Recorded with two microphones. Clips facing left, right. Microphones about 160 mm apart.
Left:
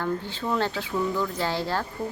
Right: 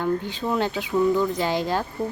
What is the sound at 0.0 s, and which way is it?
Speech, 15° right (ahead or behind).